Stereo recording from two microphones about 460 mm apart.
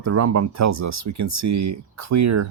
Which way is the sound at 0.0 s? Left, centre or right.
Right.